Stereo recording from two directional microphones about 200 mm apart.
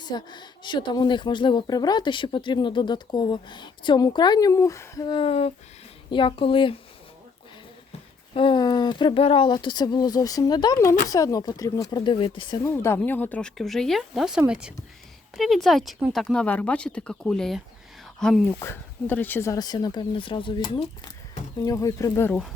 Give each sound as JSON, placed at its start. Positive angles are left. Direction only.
{"t": 0.0, "sound": "speech", "side_deg": 20}
{"t": 8.3, "sound": "speech", "side_deg": 25}
{"t": 12.6, "sound": "speech", "side_deg": 15}